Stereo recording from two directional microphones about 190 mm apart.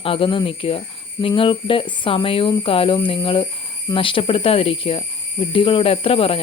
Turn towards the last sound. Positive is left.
turn(degrees=30)  # may be behind; listen again after turning